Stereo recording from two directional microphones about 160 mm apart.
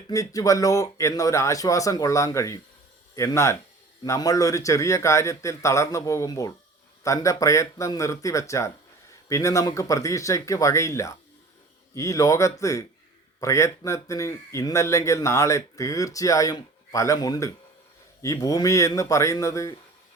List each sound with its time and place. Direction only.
0.1 s speech: 20° left (ahead or behind)